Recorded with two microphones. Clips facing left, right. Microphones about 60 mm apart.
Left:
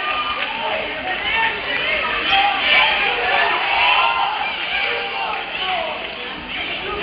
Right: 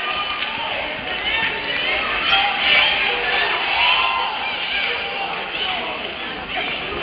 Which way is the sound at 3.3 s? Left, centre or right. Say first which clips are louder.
Left 3 dB; centre.